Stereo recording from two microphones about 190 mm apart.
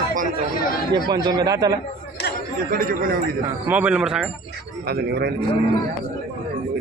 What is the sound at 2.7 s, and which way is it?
Speech, 50° right (ahead or behind).